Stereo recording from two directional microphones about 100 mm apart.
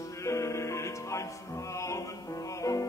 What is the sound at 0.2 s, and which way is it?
Music, 30° left (ahead or behind).